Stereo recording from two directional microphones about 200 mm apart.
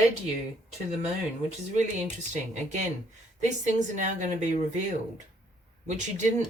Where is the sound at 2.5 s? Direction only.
35° right (ahead or behind).